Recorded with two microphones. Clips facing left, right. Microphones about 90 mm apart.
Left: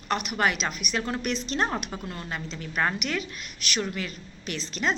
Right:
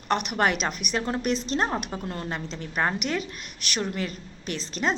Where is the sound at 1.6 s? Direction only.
20° right (ahead or behind).